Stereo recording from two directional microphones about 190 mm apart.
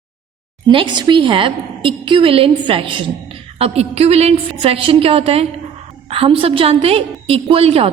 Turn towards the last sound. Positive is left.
turn(degrees=-30)  # may be behind; listen again after turning